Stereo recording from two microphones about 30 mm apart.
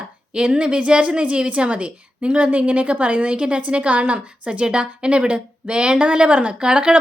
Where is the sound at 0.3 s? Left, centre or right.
Right.